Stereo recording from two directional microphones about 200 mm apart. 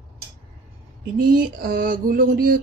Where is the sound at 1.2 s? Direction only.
45° right (ahead or behind).